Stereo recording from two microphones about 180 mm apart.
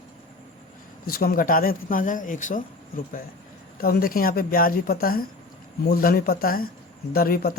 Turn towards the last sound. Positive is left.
turn(degrees=55)  # may be behind; listen again after turning